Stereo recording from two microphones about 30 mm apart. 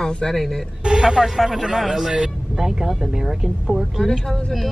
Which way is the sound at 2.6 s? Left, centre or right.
Centre.